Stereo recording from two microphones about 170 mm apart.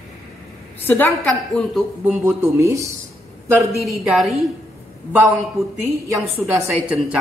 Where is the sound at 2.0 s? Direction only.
10° right (ahead or behind).